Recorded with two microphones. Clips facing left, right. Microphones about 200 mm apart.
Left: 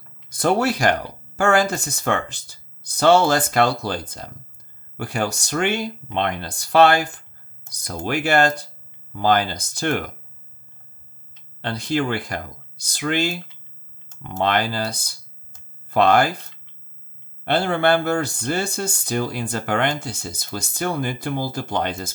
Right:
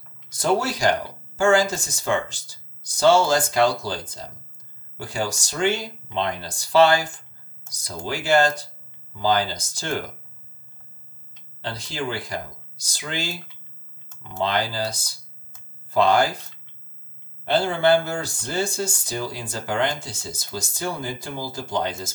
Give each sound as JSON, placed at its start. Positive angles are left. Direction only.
{"t": 0.3, "sound": "speech", "side_deg": 60}
{"t": 11.6, "sound": "speech", "side_deg": 60}
{"t": 17.4, "sound": "speech", "side_deg": 60}